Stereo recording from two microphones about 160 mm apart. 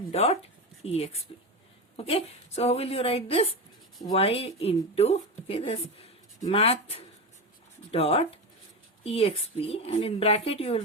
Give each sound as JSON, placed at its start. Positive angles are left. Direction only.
{"t": 0.1, "sound": "speech", "side_deg": 40}